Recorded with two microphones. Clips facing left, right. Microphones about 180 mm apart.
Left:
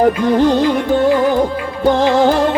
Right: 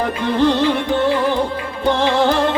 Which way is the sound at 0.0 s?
40° left (ahead or behind).